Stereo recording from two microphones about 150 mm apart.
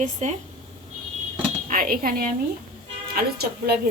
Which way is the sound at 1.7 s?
70° right (ahead or behind).